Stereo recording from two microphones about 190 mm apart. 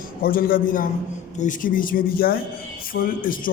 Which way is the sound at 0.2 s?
50° left (ahead or behind).